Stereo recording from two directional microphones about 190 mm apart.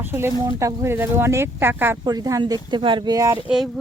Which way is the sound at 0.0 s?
10° right (ahead or behind).